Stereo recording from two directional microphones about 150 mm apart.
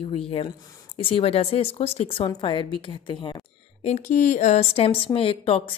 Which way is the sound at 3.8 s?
50° left (ahead or behind).